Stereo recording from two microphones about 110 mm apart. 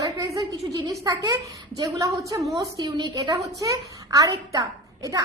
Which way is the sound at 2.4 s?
Centre (ahead or behind).